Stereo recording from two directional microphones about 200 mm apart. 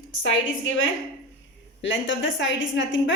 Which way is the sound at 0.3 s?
70° left (ahead or behind).